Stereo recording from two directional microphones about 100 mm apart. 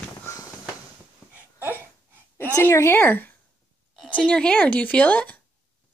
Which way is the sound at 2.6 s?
25° left (ahead or behind).